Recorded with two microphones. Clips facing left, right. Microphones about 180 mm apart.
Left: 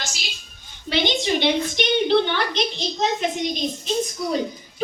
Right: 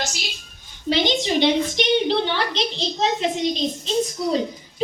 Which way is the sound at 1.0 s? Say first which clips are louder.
Right 1 dB; 35° right (ahead or behind).